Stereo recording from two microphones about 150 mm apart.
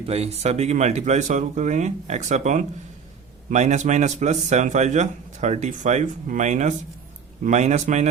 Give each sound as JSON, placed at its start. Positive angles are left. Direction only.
{"t": 0.0, "sound": "speech", "side_deg": -40}